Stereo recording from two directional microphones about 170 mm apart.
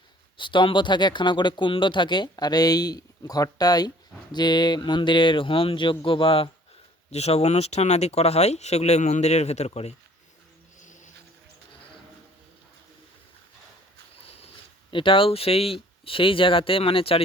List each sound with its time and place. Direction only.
0.3 s speech: 30° left (ahead or behind)
10.8 s a sound: 45° left (ahead or behind)
14.2 s speech: 35° left (ahead or behind)